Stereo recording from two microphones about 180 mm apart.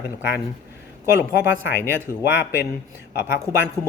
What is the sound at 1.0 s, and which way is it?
Speech, 15° right (ahead or behind).